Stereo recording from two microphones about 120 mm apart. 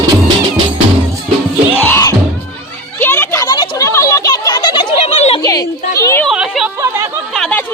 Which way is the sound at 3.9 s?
25° left (ahead or behind).